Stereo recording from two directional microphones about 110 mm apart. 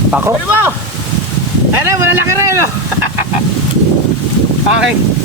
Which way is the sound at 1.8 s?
20° right (ahead or behind).